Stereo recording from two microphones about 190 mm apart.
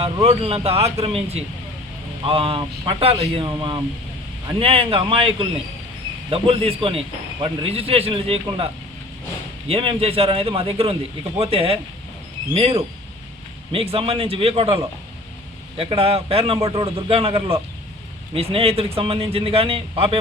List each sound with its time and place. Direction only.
0.0 s a man's voice: 30° right (ahead or behind)
15.8 s a man's voice: 30° right (ahead or behind)